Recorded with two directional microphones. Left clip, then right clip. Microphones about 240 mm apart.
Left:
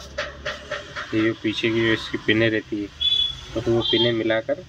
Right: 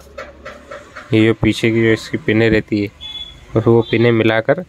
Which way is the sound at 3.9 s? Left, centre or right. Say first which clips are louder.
Right 7 dB; right.